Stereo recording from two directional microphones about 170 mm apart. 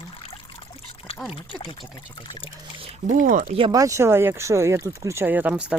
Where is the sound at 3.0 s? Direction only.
50° right (ahead or behind).